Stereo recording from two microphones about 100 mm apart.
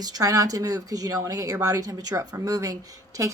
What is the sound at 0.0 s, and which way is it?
Speech, 40° right (ahead or behind).